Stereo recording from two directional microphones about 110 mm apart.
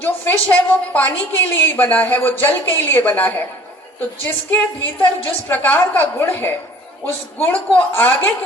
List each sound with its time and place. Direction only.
0.0 s a woman's voice: 15° left (ahead or behind)
4.8 s a woman's voice: 15° left (ahead or behind)